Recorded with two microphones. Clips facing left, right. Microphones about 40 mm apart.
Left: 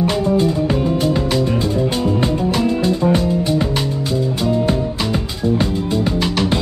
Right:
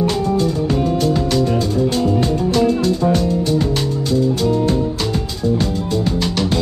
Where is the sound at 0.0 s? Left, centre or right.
Centre.